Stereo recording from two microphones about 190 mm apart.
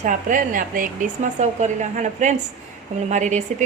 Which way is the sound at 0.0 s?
45° right (ahead or behind).